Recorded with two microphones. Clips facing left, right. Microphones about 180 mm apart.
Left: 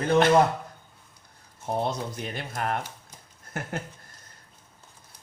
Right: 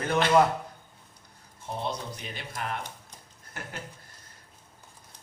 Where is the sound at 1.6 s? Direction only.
50° left (ahead or behind).